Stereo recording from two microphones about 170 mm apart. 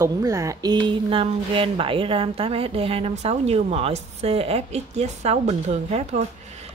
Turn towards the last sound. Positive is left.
turn(degrees=-40)  # may be behind; listen again after turning